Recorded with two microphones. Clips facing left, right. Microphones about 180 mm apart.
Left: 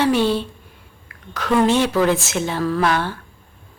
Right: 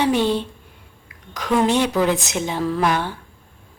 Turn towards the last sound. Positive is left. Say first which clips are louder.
# left 1 dB
turn(degrees=-15)  # may be behind; listen again after turning